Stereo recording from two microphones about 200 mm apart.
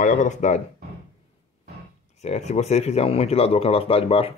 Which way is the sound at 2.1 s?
35° left (ahead or behind).